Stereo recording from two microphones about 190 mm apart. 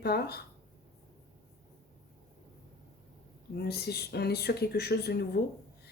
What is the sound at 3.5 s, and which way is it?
Speech, 55° left (ahead or behind).